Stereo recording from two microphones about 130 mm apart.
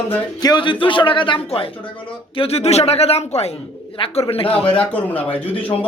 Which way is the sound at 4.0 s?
40° left (ahead or behind).